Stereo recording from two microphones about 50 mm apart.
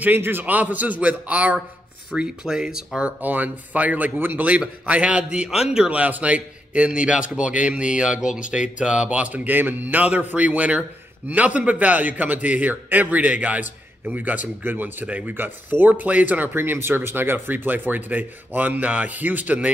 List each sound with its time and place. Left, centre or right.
0.0 s a man's voice: right
2.1 s speech: centre
3.0 s a man's voice: right
4.2 s a man's voice: right
4.5 s a man's voice: right
5.5 s speech: centre
5.9 s a man's voice: right
10.0 s a man's voice: right
16.5 s a man's voice: right